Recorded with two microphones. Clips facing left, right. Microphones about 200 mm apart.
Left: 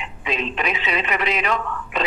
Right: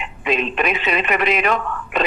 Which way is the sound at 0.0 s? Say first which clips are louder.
Right 5 dB; 60° right (ahead or behind).